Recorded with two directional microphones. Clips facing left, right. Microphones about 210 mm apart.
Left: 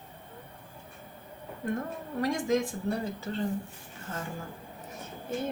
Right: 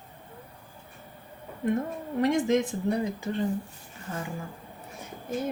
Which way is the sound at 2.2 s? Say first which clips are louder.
Right 4 dB; 20° right (ahead or behind).